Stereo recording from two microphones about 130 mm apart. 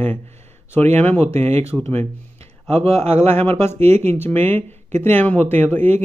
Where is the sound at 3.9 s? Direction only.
55° right (ahead or behind).